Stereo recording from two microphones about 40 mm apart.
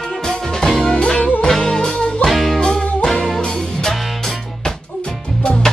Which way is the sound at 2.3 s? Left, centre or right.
Centre.